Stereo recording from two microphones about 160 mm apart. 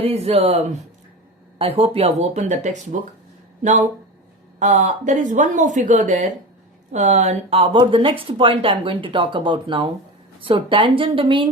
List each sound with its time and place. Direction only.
0.0 s speech: 40° right (ahead or behind)